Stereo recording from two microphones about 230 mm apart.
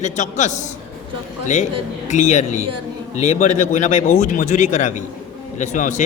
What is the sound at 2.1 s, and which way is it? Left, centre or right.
A man's voice, left.